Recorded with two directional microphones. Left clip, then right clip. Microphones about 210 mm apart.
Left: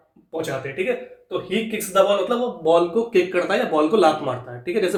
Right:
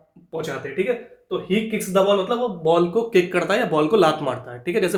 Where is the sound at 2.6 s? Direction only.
35° right (ahead or behind).